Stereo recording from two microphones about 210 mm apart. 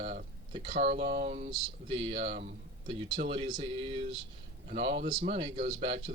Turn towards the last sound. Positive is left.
turn(degrees=-30)  # may be behind; listen again after turning